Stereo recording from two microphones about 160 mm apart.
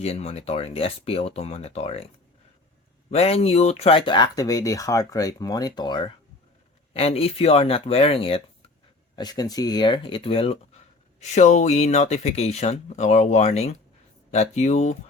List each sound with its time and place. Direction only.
0.0 s speech: 40° left (ahead or behind)
3.1 s speech: 40° left (ahead or behind)
6.9 s speech: 40° left (ahead or behind)
9.1 s speech: 25° left (ahead or behind)
11.2 s speech: 45° left (ahead or behind)